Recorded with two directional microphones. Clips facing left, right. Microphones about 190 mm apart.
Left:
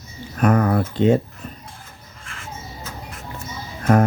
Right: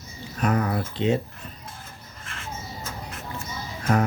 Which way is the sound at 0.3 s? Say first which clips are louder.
Left 6 dB; 55° left (ahead or behind).